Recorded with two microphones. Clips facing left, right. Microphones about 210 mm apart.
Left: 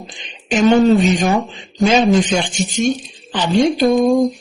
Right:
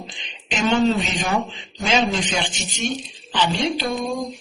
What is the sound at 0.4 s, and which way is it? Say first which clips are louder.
Speech: left 7 dB; 45° left (ahead or behind).